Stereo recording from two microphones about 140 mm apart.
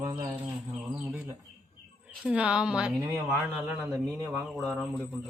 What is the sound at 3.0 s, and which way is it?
Speech, 20° right (ahead or behind).